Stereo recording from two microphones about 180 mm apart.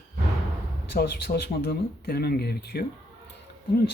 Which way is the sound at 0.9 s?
60° left (ahead or behind).